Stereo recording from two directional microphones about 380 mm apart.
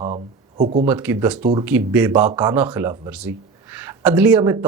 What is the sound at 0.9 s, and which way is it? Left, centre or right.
Speech, centre.